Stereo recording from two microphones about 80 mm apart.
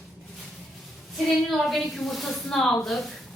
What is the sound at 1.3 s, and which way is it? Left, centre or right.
A woman's voice, centre.